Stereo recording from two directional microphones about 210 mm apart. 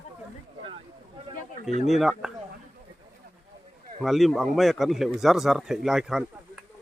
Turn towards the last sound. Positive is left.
turn(degrees=0)  # may be behind; listen again after turning